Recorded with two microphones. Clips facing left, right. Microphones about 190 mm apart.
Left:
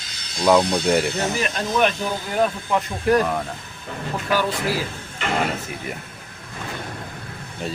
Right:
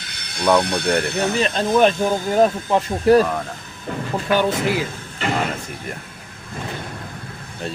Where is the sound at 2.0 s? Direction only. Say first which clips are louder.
Right 6 dB; 45° right (ahead or behind).